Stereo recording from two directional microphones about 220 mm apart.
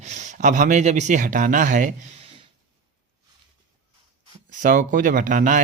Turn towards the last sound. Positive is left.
turn(degrees=-35)  # may be behind; listen again after turning